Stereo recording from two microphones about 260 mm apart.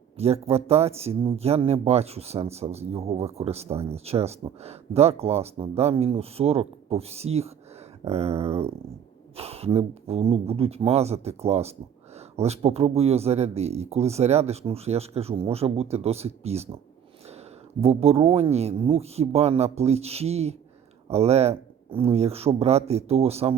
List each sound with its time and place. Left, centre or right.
0.2 s speech: right
17.2 s a sound: right
18.5 s speech: right